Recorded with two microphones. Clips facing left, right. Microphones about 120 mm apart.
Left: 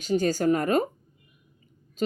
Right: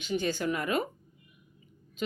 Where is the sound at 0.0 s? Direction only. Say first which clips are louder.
Left 7 dB; 40° left (ahead or behind).